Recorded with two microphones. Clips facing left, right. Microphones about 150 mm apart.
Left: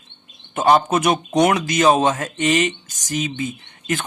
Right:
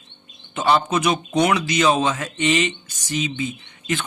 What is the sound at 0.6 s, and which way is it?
Speech, 45° left (ahead or behind).